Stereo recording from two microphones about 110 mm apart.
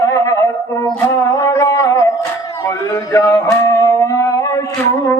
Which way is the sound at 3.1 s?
25° left (ahead or behind).